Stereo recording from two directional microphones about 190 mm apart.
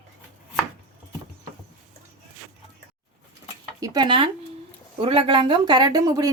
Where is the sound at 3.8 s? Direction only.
20° right (ahead or behind).